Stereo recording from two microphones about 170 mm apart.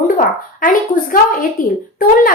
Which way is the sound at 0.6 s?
55° left (ahead or behind).